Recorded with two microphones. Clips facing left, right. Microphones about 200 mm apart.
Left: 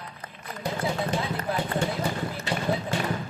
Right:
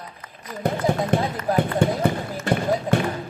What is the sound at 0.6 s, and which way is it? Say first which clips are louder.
Speech: right 7 dB; 55° right (ahead or behind).